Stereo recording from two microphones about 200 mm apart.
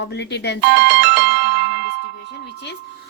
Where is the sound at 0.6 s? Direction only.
60° right (ahead or behind).